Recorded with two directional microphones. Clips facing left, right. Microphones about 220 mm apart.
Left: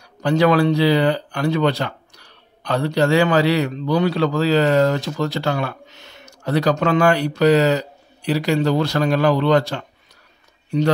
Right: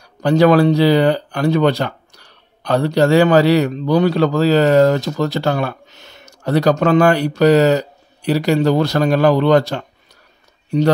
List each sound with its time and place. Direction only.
0.2 s a man's voice: 40° right (ahead or behind)